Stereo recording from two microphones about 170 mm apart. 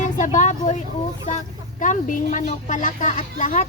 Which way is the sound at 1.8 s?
45° left (ahead or behind).